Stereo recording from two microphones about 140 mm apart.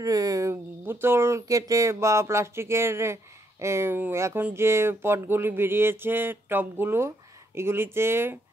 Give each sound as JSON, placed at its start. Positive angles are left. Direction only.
{"t": 0.0, "sound": "speech", "side_deg": -25}